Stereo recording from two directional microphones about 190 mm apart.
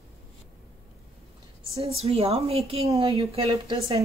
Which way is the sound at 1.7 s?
30° right (ahead or behind).